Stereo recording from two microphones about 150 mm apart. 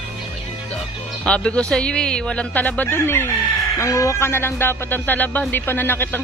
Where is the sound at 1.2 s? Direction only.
10° left (ahead or behind).